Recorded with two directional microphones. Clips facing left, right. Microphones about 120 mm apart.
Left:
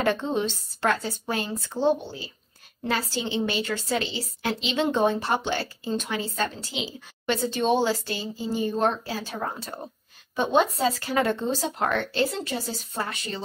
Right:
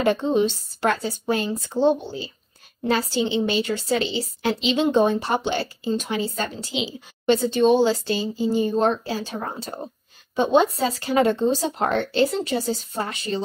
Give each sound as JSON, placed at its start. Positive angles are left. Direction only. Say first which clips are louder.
{"t": 0.0, "sound": "a woman's voice", "louder": "right 5 dB", "side_deg": -15}